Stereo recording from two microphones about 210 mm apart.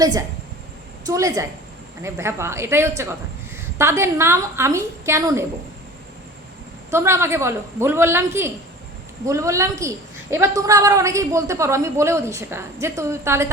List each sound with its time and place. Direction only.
0.0 s a woman's voice: 15° right (ahead or behind)
6.9 s a woman's voice: 10° right (ahead or behind)